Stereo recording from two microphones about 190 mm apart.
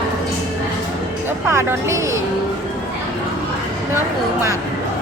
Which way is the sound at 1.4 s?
15° right (ahead or behind).